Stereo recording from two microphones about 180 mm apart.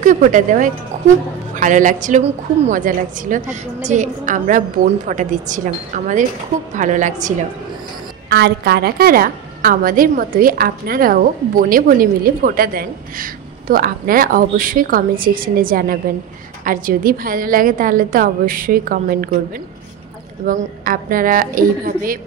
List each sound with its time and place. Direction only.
0.0 s a woman's voice: 45° right (ahead or behind)
0.9 s music: 40° right (ahead or behind)
1.5 s a woman's voice: 45° right (ahead or behind)
8.3 s a woman's voice: 65° right (ahead or behind)
20.4 s a woman's voice: 50° right (ahead or behind)